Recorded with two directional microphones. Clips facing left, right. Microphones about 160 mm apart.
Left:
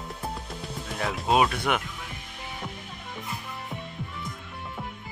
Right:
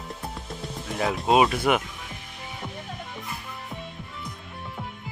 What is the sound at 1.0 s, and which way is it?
Speech, centre (ahead or behind).